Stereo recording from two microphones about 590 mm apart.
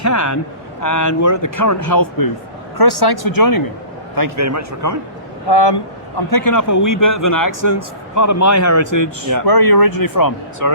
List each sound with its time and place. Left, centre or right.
0.0 s a man's voice: left
4.1 s a man's voice: right
5.5 s speech: left
10.6 s speech: right